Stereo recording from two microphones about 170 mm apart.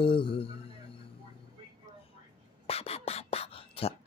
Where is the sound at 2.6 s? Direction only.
35° left (ahead or behind).